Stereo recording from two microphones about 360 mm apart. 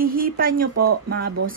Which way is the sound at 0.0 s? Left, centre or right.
Right.